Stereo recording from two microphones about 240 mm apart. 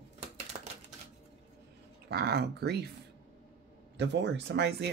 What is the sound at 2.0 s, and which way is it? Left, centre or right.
Speech, right.